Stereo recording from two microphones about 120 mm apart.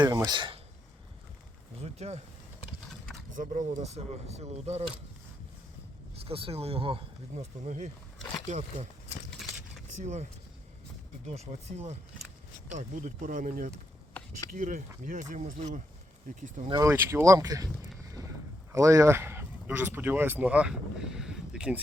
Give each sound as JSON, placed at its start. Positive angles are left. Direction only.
{"t": 0.3, "sound": "speech", "side_deg": -40}
{"t": 1.8, "sound": "a sound", "side_deg": -60}
{"t": 3.3, "sound": "speech", "side_deg": -90}
{"t": 6.1, "sound": "speech", "side_deg": -55}
{"t": 7.3, "sound": "speech", "side_deg": -80}
{"t": 9.4, "sound": "a sound", "side_deg": 0}
{"t": 10.0, "sound": "speech", "side_deg": -75}
{"t": 11.3, "sound": "speech", "side_deg": -60}
{"t": 12.7, "sound": "speech", "side_deg": -90}
{"t": 16.8, "sound": "speech", "side_deg": -25}
{"t": 18.7, "sound": "speech", "side_deg": -25}